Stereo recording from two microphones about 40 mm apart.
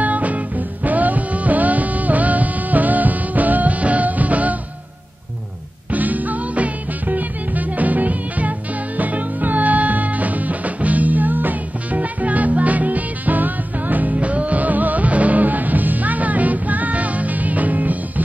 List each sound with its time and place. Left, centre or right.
0.0 s music: right
5.9 s music: right